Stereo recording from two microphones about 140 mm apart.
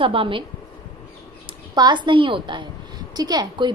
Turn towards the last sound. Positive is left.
turn(degrees=-30)  # may be behind; listen again after turning